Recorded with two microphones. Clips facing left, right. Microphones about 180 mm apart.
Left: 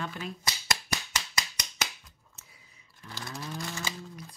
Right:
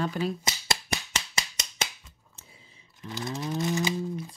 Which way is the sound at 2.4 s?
30° right (ahead or behind).